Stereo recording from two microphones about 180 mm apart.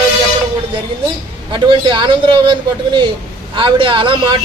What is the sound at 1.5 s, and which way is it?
A man's voice, 25° right (ahead or behind).